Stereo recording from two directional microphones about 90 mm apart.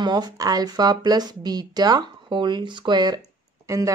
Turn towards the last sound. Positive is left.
turn(degrees=-35)  # may be behind; listen again after turning